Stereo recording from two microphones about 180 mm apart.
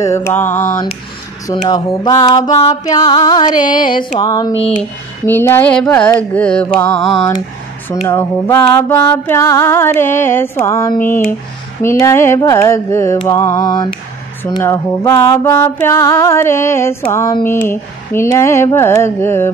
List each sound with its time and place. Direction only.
0.0 s music: 15° left (ahead or behind)
1.5 s music: 25° left (ahead or behind)
4.6 s speech: 35° left (ahead or behind)
5.2 s music: 10° left (ahead or behind)
8.1 s music: 15° left (ahead or behind)